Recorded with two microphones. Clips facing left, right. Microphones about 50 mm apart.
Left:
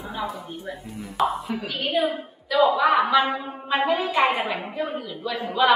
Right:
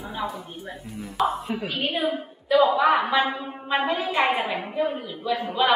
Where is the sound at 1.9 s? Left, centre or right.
Right.